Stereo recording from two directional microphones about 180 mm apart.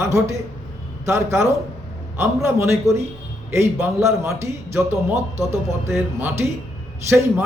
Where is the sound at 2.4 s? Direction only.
15° right (ahead or behind).